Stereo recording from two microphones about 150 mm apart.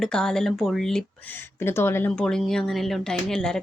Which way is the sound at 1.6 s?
15° left (ahead or behind).